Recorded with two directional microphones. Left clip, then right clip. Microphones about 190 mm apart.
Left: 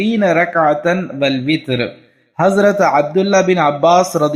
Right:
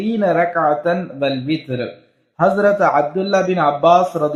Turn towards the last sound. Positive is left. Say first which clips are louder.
# left 1 dB
turn(degrees=25)  # may be behind; listen again after turning